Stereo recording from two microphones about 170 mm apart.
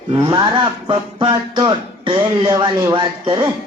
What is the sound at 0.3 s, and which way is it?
Music, 30° right (ahead or behind).